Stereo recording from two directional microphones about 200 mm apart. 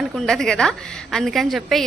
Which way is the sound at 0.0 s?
Centre (ahead or behind).